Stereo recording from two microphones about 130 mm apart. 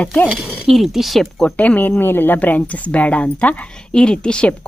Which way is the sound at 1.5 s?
10° left (ahead or behind).